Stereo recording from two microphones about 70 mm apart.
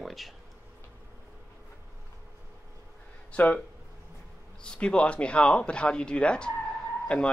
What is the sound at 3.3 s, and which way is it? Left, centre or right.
Speech, centre.